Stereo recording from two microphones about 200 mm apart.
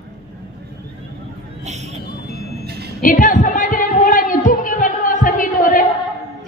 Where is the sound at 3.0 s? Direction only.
40° left (ahead or behind).